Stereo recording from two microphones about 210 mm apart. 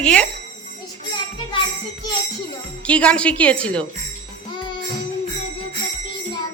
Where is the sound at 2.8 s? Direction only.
5° left (ahead or behind).